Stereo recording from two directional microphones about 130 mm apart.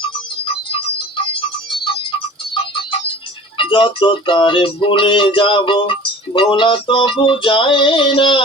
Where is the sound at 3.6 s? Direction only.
40° left (ahead or behind).